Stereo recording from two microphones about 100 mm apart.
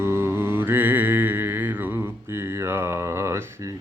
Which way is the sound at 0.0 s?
25° right (ahead or behind).